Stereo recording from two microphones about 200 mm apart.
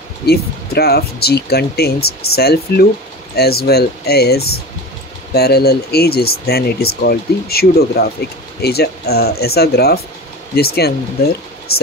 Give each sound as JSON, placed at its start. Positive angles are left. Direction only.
{"t": 0.3, "sound": "speech", "side_deg": 50}